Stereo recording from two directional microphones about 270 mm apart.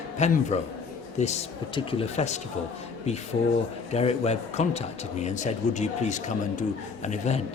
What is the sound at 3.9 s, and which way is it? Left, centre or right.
A man's voice, left.